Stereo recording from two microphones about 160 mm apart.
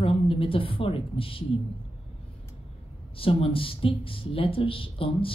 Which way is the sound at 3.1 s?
35° left (ahead or behind).